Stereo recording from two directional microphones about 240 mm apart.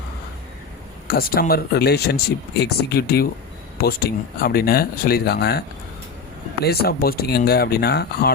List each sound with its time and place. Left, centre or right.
1.0 s speech: left
6.7 s speech: left